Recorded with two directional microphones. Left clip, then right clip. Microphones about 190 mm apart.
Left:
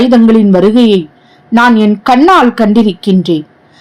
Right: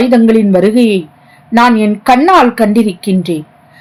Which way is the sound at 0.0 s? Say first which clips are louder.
Left 1 dB; 15° left (ahead or behind).